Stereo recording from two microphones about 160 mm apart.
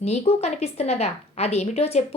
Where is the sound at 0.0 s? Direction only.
40° left (ahead or behind).